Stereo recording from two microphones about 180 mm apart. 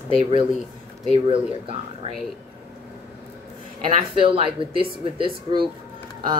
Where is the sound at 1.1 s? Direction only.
30° right (ahead or behind).